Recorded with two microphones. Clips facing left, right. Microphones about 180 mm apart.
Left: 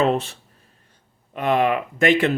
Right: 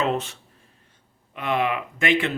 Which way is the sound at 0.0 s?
30° left (ahead or behind).